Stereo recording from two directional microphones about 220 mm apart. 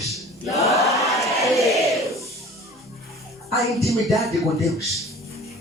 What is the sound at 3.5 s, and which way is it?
A man's voice, centre (ahead or behind).